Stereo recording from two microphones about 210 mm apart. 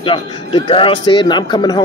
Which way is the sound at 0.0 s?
20° left (ahead or behind).